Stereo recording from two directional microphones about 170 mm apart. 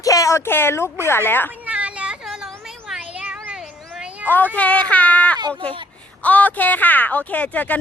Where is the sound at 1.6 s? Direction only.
5° right (ahead or behind).